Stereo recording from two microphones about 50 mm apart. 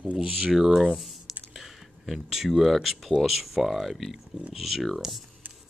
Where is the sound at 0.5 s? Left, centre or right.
Centre.